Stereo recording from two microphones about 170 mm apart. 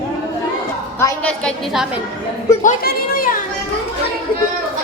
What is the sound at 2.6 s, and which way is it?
Speech, 55° left (ahead or behind).